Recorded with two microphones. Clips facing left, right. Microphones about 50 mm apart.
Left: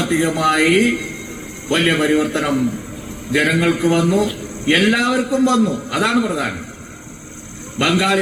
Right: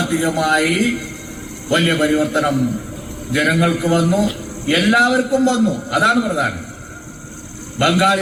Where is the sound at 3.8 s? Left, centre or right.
Left.